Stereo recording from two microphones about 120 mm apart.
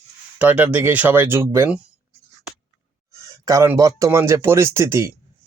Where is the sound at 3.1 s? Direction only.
25° right (ahead or behind).